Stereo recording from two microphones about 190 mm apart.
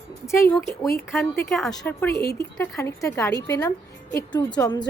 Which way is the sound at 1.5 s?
Centre (ahead or behind).